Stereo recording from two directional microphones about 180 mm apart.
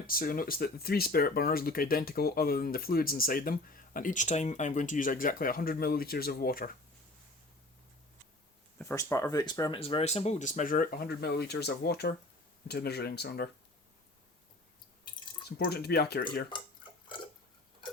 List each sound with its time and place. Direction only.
0.1 s speech: 50° left (ahead or behind)
8.8 s speech: 15° left (ahead or behind)
9.8 s speech: 35° left (ahead or behind); by 13.5 s 65° left (ahead or behind)
15.4 s speech: 65° left (ahead or behind)